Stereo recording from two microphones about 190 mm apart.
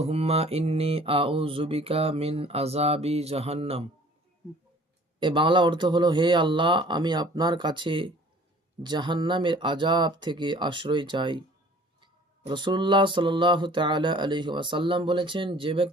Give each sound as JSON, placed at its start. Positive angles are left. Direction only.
{"t": 0.0, "sound": "mantra", "side_deg": -35}
{"t": 5.2, "sound": "speech", "side_deg": -25}
{"t": 12.5, "sound": "speech", "side_deg": -25}